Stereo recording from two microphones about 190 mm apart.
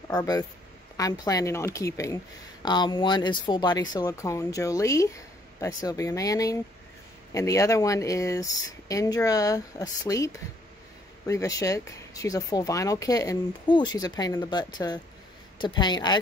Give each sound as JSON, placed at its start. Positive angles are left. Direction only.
{"t": 0.1, "sound": "speech", "side_deg": 20}